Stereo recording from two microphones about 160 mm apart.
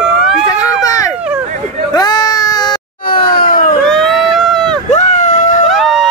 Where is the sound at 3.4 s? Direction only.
60° left (ahead or behind).